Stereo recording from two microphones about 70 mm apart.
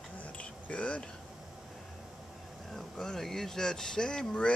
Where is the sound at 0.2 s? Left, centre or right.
Centre.